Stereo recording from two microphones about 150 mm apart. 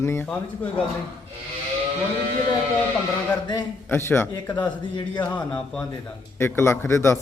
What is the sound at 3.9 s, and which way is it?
A man's voice, 15° left (ahead or behind).